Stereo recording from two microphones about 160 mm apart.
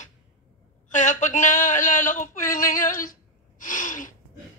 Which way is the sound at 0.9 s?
50° left (ahead or behind).